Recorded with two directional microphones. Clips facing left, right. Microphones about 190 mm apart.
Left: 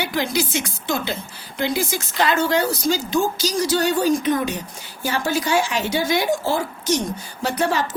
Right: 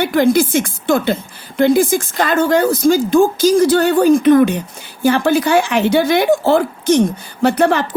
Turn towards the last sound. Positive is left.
turn(degrees=-60)  # may be behind; listen again after turning